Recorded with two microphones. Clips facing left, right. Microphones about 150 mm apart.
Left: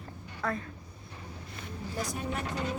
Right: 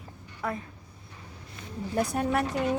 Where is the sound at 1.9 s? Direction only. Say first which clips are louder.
Right 9 dB; 60° right (ahead or behind).